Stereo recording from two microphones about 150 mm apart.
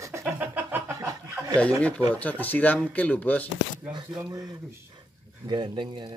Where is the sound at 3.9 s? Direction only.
30° right (ahead or behind).